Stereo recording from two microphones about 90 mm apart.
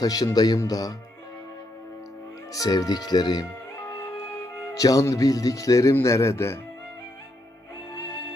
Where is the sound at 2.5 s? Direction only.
40° left (ahead or behind).